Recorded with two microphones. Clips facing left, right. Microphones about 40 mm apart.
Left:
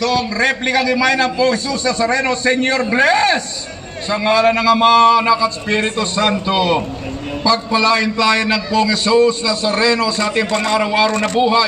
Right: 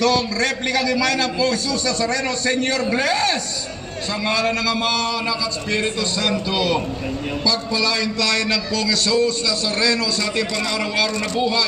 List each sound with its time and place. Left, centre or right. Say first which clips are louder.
0.1 s a man's voice: left 4 dB; left
10.8 s a man's voice: left 6 dB; left